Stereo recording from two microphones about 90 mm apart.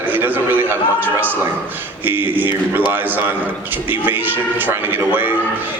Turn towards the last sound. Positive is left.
turn(degrees=-25)  # may be behind; listen again after turning